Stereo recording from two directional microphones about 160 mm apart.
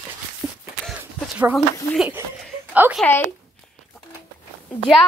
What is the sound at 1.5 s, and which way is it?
Speech, centre (ahead or behind).